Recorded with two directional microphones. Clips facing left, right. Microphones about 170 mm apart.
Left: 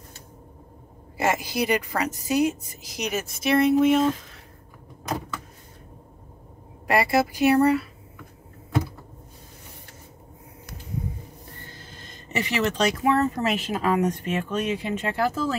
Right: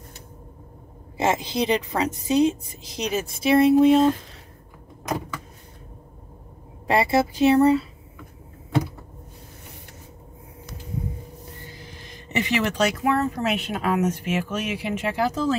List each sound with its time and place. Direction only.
1.1 s a woman's voice: 25° right (ahead or behind)
6.9 s a woman's voice: 25° right (ahead or behind)
11.6 s speech: 15° right (ahead or behind)